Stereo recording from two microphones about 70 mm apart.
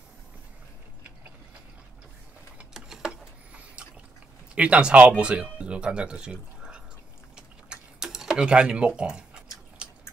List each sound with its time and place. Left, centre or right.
2.7 s tick-tock: centre
3.5 s a sound: centre
4.6 s speech: centre
7.3 s tick-tock: centre